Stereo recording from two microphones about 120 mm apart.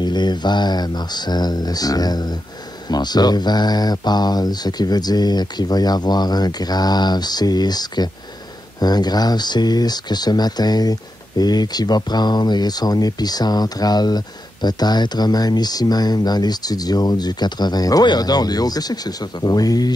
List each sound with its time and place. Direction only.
0.0 s speech: 35° left (ahead or behind)